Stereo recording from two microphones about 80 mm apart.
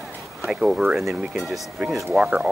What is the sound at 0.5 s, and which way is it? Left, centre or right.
Speech, centre.